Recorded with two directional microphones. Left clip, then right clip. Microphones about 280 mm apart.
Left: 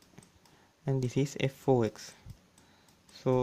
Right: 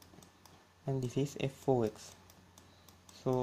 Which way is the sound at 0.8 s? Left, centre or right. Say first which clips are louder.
Left 4 dB; left.